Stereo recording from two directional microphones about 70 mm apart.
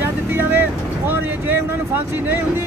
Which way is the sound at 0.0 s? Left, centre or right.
Right.